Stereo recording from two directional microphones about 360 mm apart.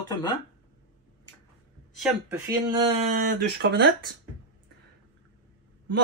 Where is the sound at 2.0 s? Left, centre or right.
Centre; by 4.1 s right.